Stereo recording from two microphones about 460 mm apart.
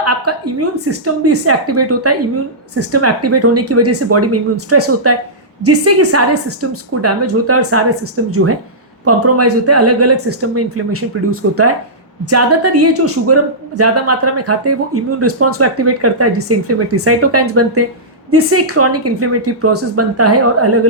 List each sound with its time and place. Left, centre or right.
0.0 s a man's voice: right